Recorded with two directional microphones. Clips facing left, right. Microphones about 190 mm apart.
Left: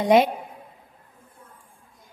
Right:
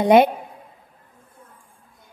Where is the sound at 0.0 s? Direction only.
60° right (ahead or behind).